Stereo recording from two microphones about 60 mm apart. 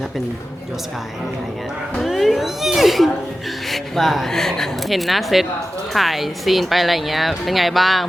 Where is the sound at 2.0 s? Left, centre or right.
Centre.